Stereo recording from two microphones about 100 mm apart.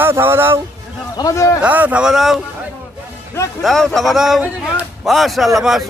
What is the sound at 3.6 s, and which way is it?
A man's voice, 5° left (ahead or behind).